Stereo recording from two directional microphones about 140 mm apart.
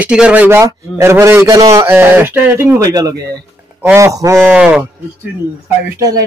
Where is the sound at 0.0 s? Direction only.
10° right (ahead or behind).